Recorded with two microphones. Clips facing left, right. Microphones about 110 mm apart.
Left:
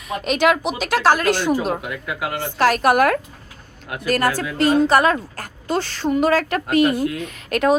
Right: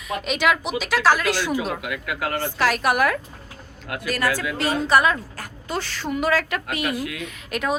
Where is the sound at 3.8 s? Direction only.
20° left (ahead or behind).